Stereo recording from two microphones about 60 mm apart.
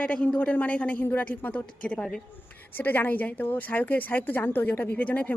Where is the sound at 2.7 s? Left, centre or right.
Left.